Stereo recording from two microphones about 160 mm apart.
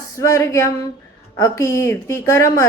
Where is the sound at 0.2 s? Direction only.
20° left (ahead or behind).